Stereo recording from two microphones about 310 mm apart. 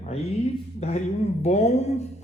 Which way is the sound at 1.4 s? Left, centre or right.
Left.